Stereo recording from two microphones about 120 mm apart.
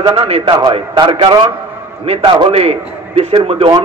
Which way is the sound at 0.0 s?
55° right (ahead or behind).